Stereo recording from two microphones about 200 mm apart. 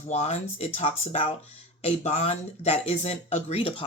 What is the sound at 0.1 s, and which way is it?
Speech, 35° left (ahead or behind).